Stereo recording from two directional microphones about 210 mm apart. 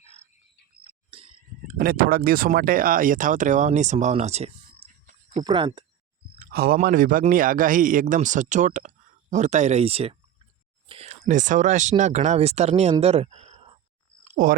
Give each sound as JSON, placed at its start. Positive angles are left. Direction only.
{"t": 0.9, "sound": "frog", "side_deg": -25}
{"t": 1.6, "sound": "speech", "side_deg": -45}
{"t": 4.8, "sound": "a sound", "side_deg": -25}
{"t": 5.4, "sound": "speech", "side_deg": -20}
{"t": 6.4, "sound": "a sound", "side_deg": -45}
{"t": 6.7, "sound": "speech", "side_deg": -40}
{"t": 14.4, "sound": "speech", "side_deg": -40}